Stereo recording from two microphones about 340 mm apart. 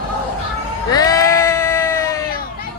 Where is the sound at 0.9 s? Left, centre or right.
Centre.